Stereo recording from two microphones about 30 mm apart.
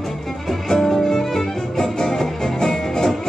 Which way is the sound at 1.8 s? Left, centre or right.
Centre.